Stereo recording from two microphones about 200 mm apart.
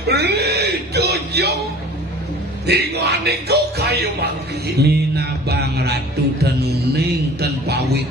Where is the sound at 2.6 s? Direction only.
55° right (ahead or behind).